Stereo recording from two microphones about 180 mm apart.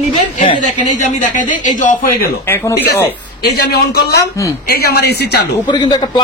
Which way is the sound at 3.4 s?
65° left (ahead or behind).